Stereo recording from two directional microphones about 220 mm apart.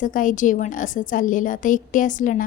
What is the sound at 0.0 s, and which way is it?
Speech, 35° left (ahead or behind).